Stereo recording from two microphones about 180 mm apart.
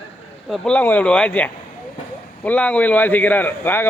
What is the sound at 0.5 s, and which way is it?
A man's voice, 5° left (ahead or behind).